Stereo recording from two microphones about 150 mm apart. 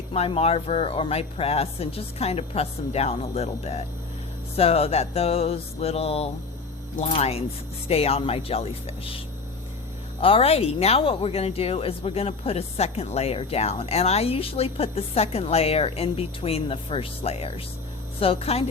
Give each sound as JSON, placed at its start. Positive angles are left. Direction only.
{"t": 0.1, "sound": "speech", "side_deg": 40}